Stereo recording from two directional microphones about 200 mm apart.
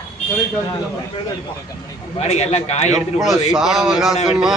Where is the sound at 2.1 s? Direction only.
30° left (ahead or behind).